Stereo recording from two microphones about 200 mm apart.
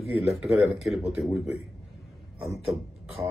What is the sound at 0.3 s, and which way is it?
Speech, 5° right (ahead or behind).